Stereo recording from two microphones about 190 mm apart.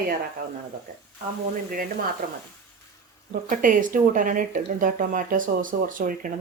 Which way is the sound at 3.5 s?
45° right (ahead or behind).